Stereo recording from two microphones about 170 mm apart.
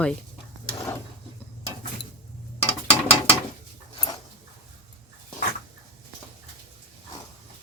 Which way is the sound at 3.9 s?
20° left (ahead or behind).